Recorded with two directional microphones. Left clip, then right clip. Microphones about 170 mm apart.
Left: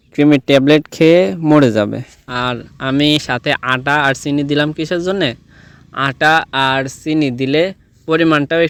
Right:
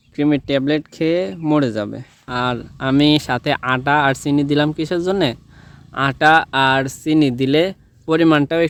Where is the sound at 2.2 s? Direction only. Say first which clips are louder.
Left 1 dB; 5° left (ahead or behind).